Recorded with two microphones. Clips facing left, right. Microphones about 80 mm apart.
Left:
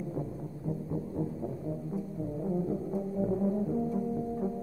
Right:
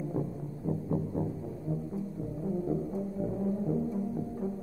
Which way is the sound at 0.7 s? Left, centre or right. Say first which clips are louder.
Right 3 dB; centre.